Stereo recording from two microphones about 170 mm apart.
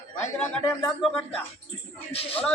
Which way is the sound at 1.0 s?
5° left (ahead or behind).